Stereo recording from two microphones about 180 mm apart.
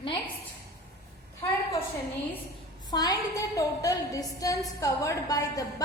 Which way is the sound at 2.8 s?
20° left (ahead or behind).